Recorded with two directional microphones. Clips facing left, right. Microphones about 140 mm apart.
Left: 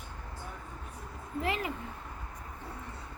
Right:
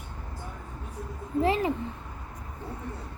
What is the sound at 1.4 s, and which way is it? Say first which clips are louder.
Speech: right 8 dB; 30° right (ahead or behind).